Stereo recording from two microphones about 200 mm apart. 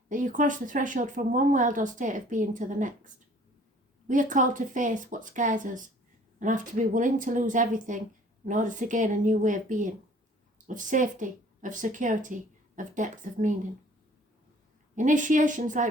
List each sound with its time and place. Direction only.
0.1 s speech: 40° right (ahead or behind)
4.1 s speech: 40° right (ahead or behind)
14.9 s speech: 40° right (ahead or behind)